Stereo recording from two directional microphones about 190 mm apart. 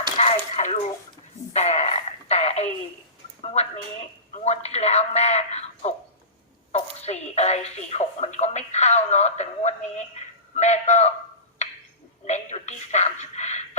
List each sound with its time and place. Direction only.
0.2 s a sound: 35° left (ahead or behind)
3.4 s speech: 35° left (ahead or behind)
12.2 s a woman's voice: 35° left (ahead or behind)